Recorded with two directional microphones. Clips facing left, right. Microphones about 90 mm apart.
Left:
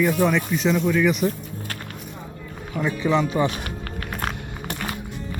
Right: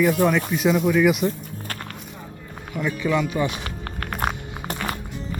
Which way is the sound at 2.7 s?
25° left (ahead or behind).